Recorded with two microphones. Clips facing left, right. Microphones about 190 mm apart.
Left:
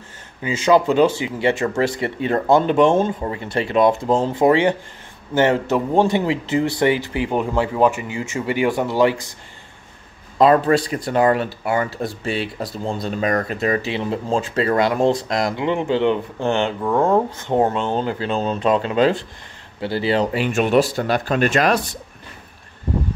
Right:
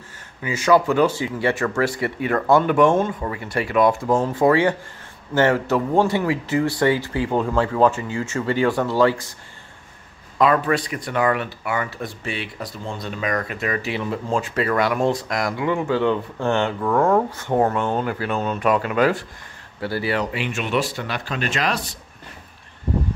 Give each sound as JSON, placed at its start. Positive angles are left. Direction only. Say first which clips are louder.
{"t": 0.4, "sound": "speech", "louder": "left 2 dB", "side_deg": 20}
{"t": 10.3, "sound": "speech", "louder": "left 4 dB", "side_deg": 30}
{"t": 20.3, "sound": "speech", "louder": "left 7 dB", "side_deg": 45}